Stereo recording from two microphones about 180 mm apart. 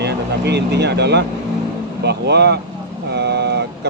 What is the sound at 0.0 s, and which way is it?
Speech, 70° right (ahead or behind).